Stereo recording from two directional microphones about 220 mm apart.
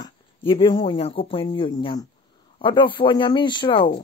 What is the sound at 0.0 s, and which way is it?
Speech, 25° left (ahead or behind).